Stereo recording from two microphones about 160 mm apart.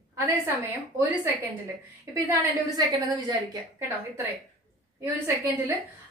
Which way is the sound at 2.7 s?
25° right (ahead or behind).